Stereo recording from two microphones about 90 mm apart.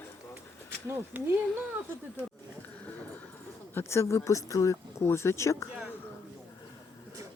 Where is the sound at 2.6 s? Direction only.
20° left (ahead or behind).